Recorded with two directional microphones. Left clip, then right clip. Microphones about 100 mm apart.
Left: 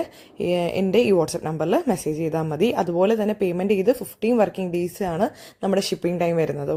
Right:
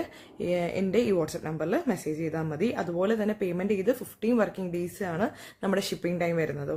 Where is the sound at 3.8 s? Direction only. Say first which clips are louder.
Left 7 dB; 45° left (ahead or behind).